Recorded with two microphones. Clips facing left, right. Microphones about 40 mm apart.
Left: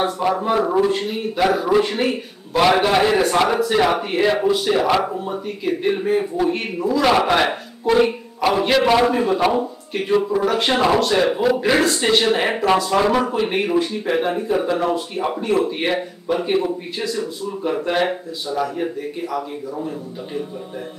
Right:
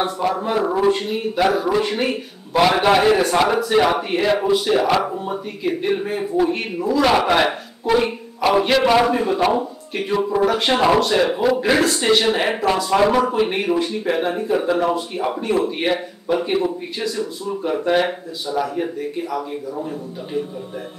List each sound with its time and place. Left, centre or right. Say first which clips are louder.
0.0 s a man's voice: left 1 dB; centre